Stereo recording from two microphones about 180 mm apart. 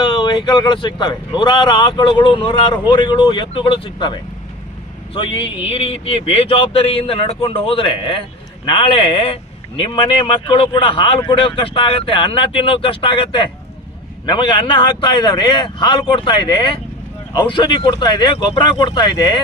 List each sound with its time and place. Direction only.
0.0 s speech: 25° left (ahead or behind)